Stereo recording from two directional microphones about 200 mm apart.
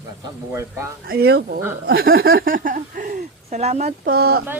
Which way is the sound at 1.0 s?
50° right (ahead or behind).